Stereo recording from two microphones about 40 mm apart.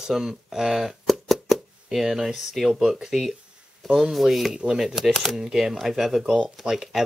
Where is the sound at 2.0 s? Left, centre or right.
Centre.